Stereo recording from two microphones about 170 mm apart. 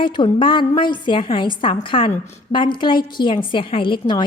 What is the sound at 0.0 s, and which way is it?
A woman's voice, 30° left (ahead or behind).